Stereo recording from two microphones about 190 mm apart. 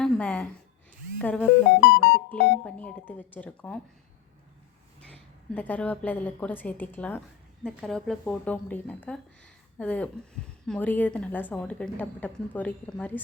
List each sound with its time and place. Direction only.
0.0 s a sound: 5° left (ahead or behind)
1.2 s a woman's voice: 5° left (ahead or behind)
1.8 s music: 65° left (ahead or behind)
2.6 s a woman's voice: 5° left (ahead or behind)
4.9 s a woman's voice: 5° left (ahead or behind)